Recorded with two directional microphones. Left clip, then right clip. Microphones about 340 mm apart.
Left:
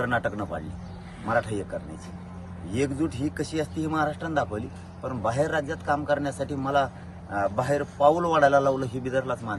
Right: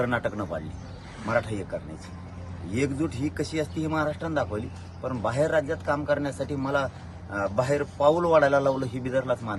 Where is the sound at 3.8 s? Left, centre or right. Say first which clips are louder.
Left 2 dB; centre.